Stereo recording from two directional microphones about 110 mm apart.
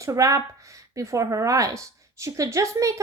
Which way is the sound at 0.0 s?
30° right (ahead or behind).